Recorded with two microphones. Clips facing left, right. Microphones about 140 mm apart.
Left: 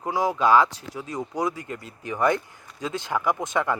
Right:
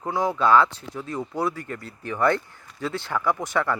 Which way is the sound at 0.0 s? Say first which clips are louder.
Even; 15° left (ahead or behind).